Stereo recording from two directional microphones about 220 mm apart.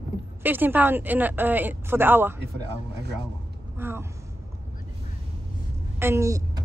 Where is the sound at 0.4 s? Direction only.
10° right (ahead or behind).